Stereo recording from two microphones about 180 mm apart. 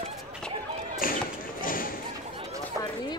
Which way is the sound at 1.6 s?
50° left (ahead or behind).